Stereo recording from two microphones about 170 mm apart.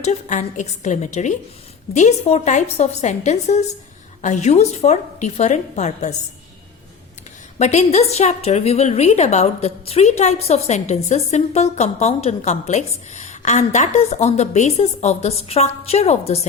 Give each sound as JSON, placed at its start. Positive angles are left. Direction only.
{"t": 0.0, "sound": "a woman's voice", "side_deg": 45}
{"t": 7.6, "sound": "a woman's voice", "side_deg": 40}